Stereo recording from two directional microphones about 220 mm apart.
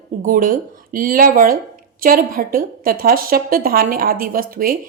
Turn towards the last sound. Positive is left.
turn(degrees=-40)  # may be behind; listen again after turning